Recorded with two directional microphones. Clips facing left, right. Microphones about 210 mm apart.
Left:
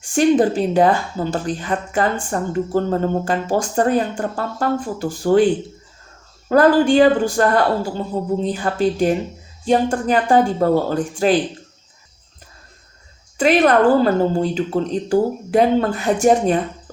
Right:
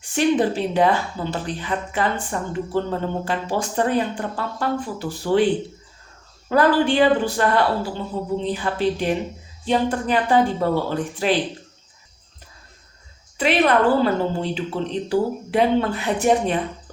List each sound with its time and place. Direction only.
0.0 s speech: 45° left (ahead or behind)
6.5 s speech: 45° left (ahead or behind)
13.4 s speech: 45° left (ahead or behind)